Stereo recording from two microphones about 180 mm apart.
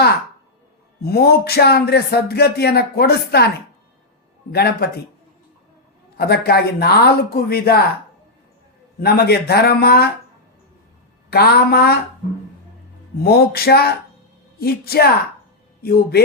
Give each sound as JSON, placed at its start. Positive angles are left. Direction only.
{"t": 1.0, "sound": "speech", "side_deg": 60}
{"t": 4.5, "sound": "speech", "side_deg": 60}
{"t": 6.1, "sound": "speech", "side_deg": 60}
{"t": 9.0, "sound": "speech", "side_deg": 60}
{"t": 11.3, "sound": "speech", "side_deg": 60}
{"t": 13.2, "sound": "speech", "side_deg": 60}